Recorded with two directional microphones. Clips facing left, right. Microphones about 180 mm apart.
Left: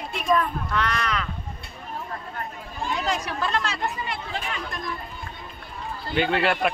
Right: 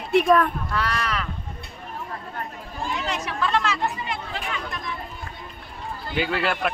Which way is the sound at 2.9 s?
35° left (ahead or behind).